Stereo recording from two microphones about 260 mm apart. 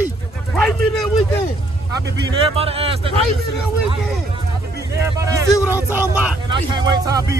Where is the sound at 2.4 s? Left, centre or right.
Right.